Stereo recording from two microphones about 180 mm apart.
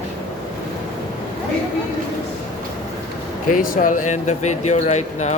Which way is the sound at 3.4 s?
50° left (ahead or behind).